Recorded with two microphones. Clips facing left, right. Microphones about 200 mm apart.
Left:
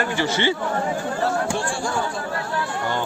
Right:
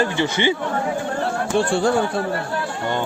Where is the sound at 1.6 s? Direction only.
60° right (ahead or behind).